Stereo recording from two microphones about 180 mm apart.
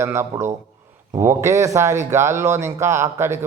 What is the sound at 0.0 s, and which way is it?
Speech, 15° right (ahead or behind).